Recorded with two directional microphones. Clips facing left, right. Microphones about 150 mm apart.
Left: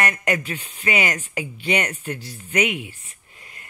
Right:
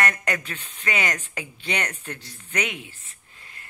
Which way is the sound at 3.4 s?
15° left (ahead or behind).